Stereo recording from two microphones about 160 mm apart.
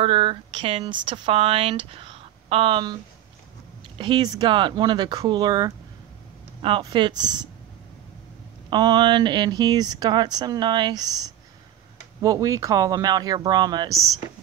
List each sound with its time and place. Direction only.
0.0 s speech: 35° right (ahead or behind)
4.0 s speech: 30° right (ahead or behind)
8.6 s speech: 30° right (ahead or behind)